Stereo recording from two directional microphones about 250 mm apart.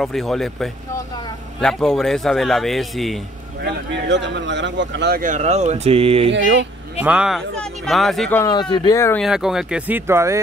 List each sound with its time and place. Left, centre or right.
0.0 s speech: centre
3.6 s speech: right
7.0 s speech: centre
9.2 s speech: centre